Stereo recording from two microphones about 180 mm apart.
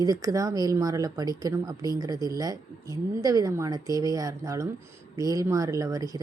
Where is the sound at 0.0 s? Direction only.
20° right (ahead or behind).